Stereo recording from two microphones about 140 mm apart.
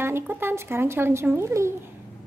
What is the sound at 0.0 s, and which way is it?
Speech, 15° right (ahead or behind).